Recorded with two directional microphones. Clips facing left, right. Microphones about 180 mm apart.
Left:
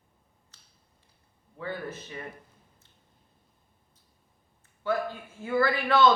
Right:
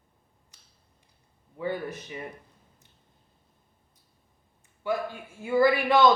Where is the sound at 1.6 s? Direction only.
15° right (ahead or behind).